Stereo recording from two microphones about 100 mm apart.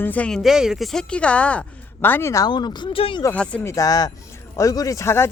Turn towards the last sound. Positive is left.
turn(degrees=25)  # may be behind; listen again after turning